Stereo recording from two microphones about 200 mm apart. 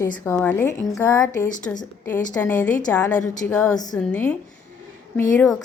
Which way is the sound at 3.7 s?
20° left (ahead or behind).